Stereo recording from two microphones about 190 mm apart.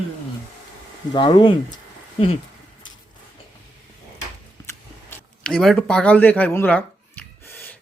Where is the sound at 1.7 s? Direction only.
30° left (ahead or behind).